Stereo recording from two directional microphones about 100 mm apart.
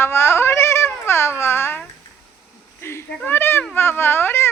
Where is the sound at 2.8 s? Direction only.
25° left (ahead or behind).